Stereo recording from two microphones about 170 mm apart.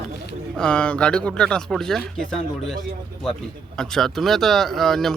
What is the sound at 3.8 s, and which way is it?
Speech, centre (ahead or behind).